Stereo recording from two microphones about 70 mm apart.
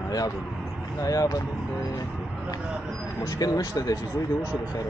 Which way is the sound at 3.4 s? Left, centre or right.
Left.